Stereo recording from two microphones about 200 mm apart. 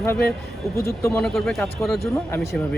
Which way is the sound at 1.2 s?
Centre (ahead or behind).